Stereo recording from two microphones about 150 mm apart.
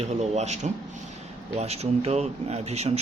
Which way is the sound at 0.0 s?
50° right (ahead or behind).